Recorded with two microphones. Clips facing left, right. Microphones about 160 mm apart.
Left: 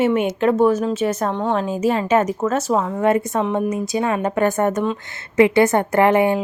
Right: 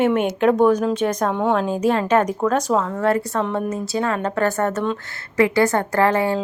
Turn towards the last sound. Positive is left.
turn(degrees=20)  # may be behind; listen again after turning